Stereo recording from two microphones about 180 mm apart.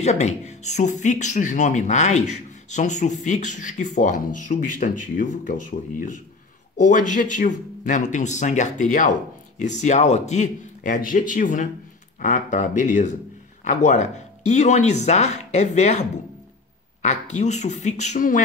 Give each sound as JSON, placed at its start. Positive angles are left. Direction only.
{"t": 0.0, "sound": "speech", "side_deg": 40}